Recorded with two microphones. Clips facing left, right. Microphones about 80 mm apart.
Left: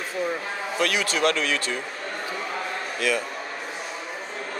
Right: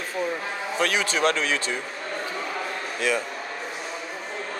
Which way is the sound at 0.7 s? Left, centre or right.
Right.